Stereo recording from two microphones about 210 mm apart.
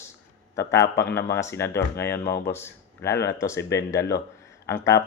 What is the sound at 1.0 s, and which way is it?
Speech, 55° left (ahead or behind).